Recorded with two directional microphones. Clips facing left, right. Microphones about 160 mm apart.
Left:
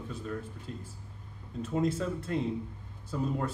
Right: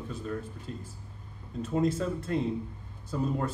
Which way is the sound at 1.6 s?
40° right (ahead or behind).